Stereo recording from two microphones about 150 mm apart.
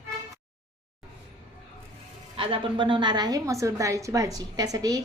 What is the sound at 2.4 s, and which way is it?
A woman's voice, 35° right (ahead or behind).